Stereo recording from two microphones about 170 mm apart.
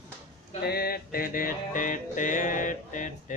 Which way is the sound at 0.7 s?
65° left (ahead or behind).